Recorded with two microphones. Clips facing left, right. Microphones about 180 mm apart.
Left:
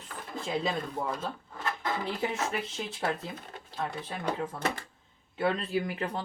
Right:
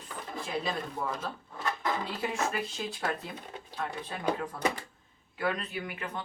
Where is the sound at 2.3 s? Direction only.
25° left (ahead or behind).